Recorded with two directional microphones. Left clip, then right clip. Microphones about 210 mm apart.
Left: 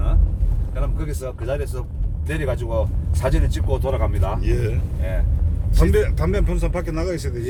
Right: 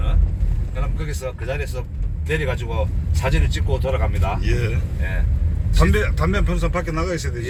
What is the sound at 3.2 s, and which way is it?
Speech, 40° left (ahead or behind).